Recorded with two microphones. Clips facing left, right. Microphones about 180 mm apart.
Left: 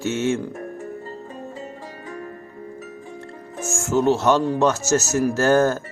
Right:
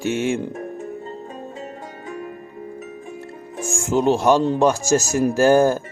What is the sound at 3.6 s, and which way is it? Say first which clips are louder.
Music: right 1 dB; 15° right (ahead or behind).